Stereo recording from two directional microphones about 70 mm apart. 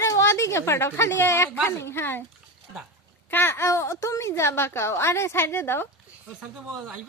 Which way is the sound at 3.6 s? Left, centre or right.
Left.